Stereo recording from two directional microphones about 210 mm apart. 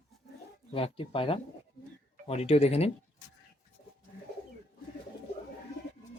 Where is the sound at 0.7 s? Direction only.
25° left (ahead or behind).